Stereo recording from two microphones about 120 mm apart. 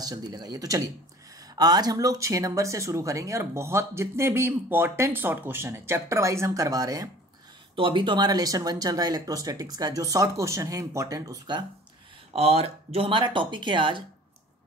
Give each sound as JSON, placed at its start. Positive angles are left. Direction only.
{"t": 0.0, "sound": "speech", "side_deg": -35}
{"t": 7.7, "sound": "speech", "side_deg": -45}
{"t": 12.3, "sound": "speech", "side_deg": -55}